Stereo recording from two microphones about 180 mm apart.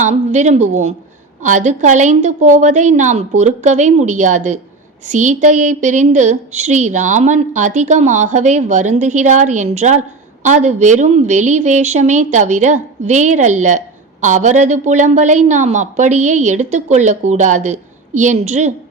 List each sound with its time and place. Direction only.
0.0 s a woman's voice: 40° right (ahead or behind)